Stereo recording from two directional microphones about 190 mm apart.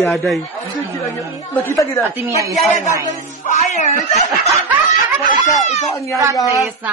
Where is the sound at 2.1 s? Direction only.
15° right (ahead or behind).